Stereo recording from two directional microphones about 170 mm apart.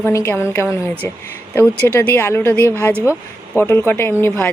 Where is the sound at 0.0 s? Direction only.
15° left (ahead or behind).